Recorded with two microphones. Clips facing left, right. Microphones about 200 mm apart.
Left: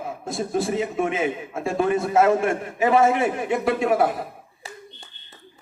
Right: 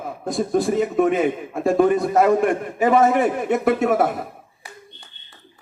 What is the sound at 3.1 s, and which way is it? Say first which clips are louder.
A man's voice: right 3 dB; 45° right (ahead or behind).